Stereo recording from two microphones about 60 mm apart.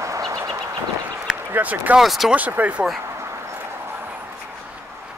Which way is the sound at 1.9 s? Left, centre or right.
Centre.